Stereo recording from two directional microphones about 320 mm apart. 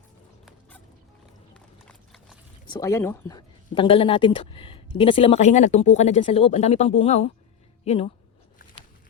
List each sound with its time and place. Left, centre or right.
1.5 s clip-clop: centre
2.6 s speech: centre